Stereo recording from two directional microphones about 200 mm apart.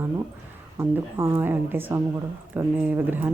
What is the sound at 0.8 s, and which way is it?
Speech, 10° right (ahead or behind).